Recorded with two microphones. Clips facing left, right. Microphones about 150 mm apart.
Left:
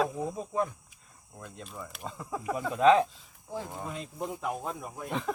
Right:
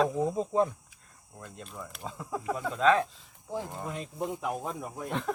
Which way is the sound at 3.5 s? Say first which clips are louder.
Right 2 dB; 15° right (ahead or behind).